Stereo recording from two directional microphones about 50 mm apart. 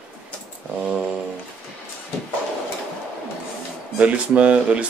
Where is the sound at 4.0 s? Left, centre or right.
Right.